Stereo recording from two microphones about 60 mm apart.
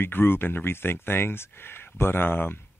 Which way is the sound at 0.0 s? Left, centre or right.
Left.